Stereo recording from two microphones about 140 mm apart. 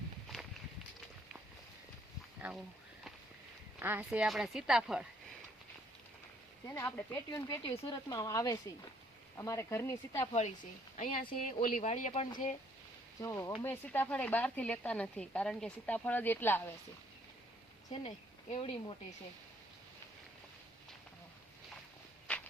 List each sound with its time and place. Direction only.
3.8 s speech: 15° right (ahead or behind)
6.7 s speech: 15° left (ahead or behind)
7.3 s speech: 25° left (ahead or behind)
10.9 s speech: 70° left (ahead or behind)
11.6 s speech: 60° left (ahead or behind)
13.2 s speech: 20° left (ahead or behind)
17.9 s speech: 45° left (ahead or behind)
22.3 s walk: 10° left (ahead or behind)